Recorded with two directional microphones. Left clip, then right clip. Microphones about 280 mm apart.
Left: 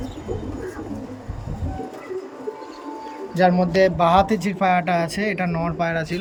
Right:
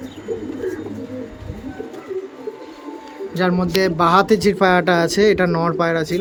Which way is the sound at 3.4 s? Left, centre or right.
Centre.